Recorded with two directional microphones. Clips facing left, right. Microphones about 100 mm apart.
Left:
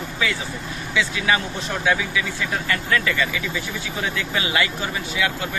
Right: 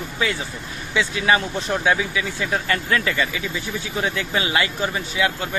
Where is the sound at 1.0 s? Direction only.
30° right (ahead or behind).